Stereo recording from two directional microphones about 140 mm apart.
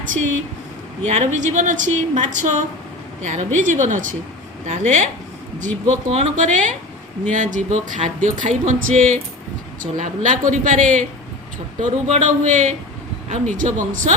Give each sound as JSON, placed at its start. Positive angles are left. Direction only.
{"t": 0.0, "sound": "a sound", "side_deg": -70}
{"t": 1.0, "sound": "speech", "side_deg": -55}
{"t": 12.0, "sound": "speech", "side_deg": -55}